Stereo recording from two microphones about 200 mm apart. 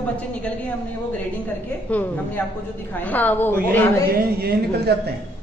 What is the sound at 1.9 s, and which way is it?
A man's voice, 10° left (ahead or behind).